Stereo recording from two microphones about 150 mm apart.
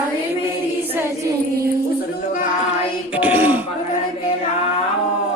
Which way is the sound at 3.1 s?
10° right (ahead or behind).